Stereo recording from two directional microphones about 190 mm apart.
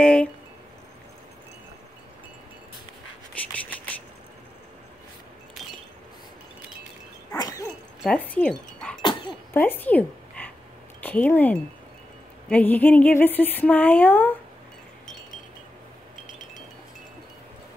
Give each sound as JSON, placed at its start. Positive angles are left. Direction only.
{"t": 0.0, "sound": "speech", "side_deg": 5}
{"t": 7.3, "sound": "dog", "side_deg": 20}
{"t": 8.0, "sound": "dog", "side_deg": 5}
{"t": 9.5, "sound": "speech", "side_deg": 10}